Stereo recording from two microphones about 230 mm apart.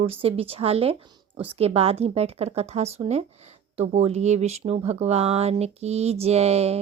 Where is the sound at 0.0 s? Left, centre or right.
Right.